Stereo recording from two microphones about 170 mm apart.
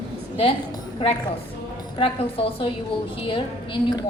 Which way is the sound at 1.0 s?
30° left (ahead or behind).